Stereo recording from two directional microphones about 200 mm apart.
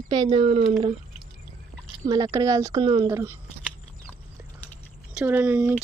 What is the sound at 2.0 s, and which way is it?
Speech, 20° right (ahead or behind).